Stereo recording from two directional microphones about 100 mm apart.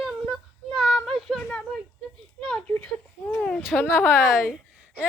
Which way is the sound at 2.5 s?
10° left (ahead or behind).